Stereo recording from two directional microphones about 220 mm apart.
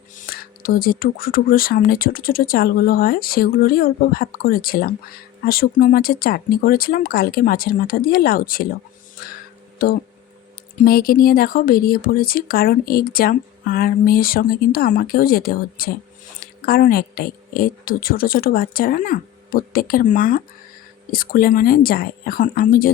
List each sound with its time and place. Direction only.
0.2 s speech: 40° left (ahead or behind)
9.8 s speech: 40° left (ahead or behind)